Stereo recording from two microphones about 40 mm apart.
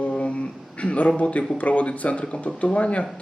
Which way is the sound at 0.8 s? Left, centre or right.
Left.